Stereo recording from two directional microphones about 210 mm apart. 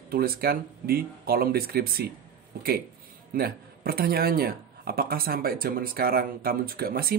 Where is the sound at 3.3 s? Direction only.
45° right (ahead or behind).